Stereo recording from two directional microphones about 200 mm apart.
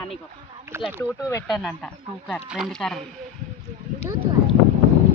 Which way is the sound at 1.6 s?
5° left (ahead or behind).